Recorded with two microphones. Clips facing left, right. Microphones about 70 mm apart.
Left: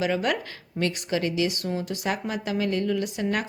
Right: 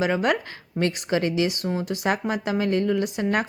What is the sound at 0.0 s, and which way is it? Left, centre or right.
A woman's voice, right.